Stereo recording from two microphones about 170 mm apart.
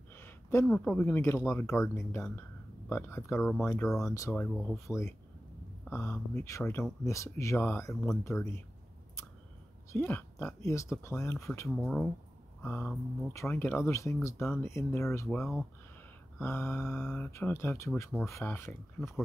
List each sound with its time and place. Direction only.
0.1 s a sound: 15° left (ahead or behind)
0.7 s speech: 5° left (ahead or behind)
9.9 s speech: 10° left (ahead or behind)
11.7 s speech: centre (ahead or behind)
16.3 s speech: 15° left (ahead or behind)